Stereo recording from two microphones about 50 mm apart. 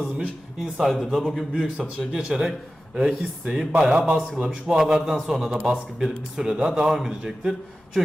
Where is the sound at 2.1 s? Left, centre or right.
Centre.